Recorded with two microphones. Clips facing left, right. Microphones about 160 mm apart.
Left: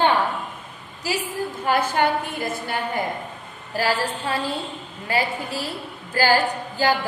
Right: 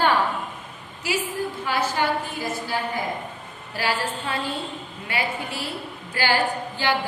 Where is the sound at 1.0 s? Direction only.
35° left (ahead or behind).